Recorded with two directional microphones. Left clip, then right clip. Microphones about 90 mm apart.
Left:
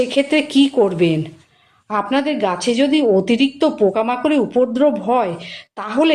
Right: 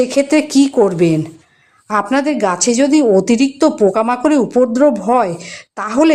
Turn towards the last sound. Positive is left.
turn(degrees=-65)  # may be behind; listen again after turning